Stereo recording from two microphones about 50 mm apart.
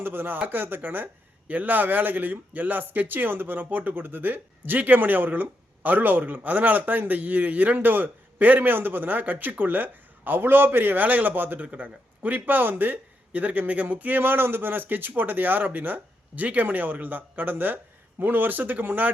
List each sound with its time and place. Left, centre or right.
0.0 s speech: right